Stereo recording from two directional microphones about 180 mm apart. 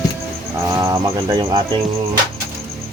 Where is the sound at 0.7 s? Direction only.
20° right (ahead or behind).